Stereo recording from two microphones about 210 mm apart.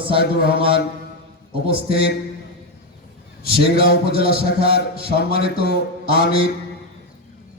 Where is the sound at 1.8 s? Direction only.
25° right (ahead or behind).